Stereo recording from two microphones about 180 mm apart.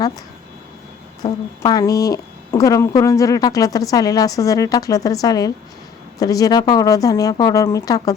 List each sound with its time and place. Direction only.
1.2 s speech: 20° left (ahead or behind)